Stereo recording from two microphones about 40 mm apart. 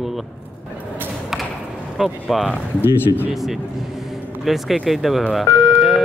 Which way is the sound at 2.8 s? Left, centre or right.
Left.